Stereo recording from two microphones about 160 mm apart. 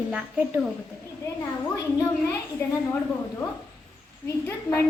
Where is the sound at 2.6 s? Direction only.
15° left (ahead or behind).